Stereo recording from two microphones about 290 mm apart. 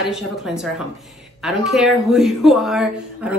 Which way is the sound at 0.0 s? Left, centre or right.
Centre.